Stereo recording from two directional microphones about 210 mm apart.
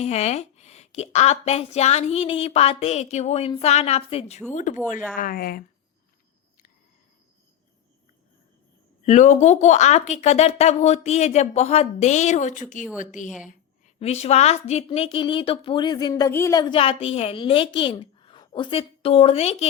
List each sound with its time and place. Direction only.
0.0 s speech: 30° left (ahead or behind)
9.0 s a woman's voice: 35° left (ahead or behind)